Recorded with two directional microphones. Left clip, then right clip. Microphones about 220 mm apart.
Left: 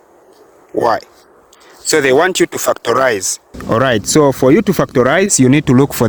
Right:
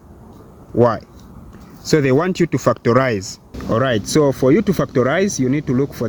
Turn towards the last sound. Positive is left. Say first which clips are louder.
# left 8 dB
turn(degrees=55)  # may be behind; listen again after turning